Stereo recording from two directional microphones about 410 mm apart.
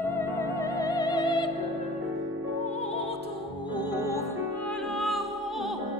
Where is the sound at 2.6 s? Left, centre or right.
Centre.